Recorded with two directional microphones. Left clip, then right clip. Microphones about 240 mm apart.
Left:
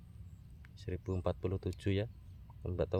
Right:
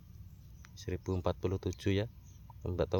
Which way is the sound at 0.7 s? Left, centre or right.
Centre.